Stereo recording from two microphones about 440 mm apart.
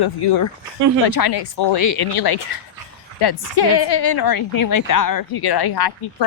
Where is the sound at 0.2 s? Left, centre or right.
Left.